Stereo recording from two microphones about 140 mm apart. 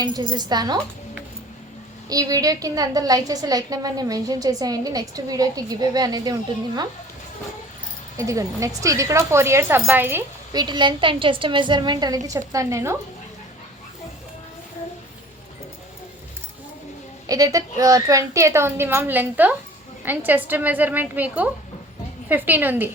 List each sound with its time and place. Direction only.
0.0 s a woman's voice: 30° right (ahead or behind)
2.0 s a woman's voice: 25° right (ahead or behind)
8.2 s a woman's voice: 25° right (ahead or behind)
10.5 s a woman's voice: 30° right (ahead or behind)
17.2 s a woman's voice: 25° right (ahead or behind)